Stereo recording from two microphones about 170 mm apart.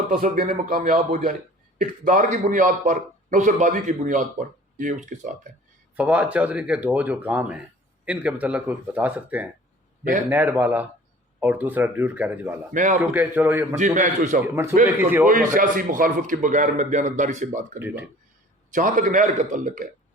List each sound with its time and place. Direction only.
0.1 s a man's voice: 55° right (ahead or behind)
6.0 s speech: 10° right (ahead or behind)
12.7 s a man's voice: 50° right (ahead or behind)
13.0 s speech: 10° right (ahead or behind)
13.7 s a man's voice: 45° right (ahead or behind)
14.4 s speech: 15° right (ahead or behind)
15.3 s a man's voice: 55° right (ahead or behind)
17.7 s speech: 10° right (ahead or behind)
18.7 s a man's voice: 50° right (ahead or behind)